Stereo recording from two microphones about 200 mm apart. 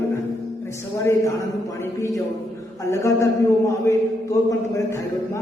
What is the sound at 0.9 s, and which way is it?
A man's voice, 15° left (ahead or behind).